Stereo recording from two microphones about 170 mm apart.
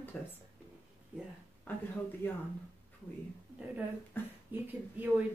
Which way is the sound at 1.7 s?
10° left (ahead or behind).